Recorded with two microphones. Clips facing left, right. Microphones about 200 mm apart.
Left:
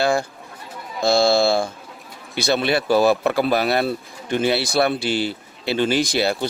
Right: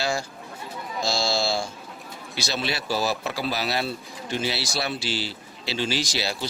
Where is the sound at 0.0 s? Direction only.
55° left (ahead or behind).